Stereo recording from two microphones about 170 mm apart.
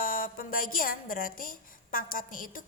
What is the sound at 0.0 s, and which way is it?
A woman's voice, 55° left (ahead or behind).